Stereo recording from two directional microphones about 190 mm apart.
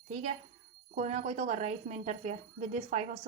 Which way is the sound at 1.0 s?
35° right (ahead or behind).